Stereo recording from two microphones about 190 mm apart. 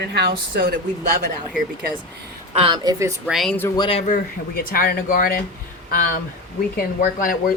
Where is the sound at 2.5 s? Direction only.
30° right (ahead or behind).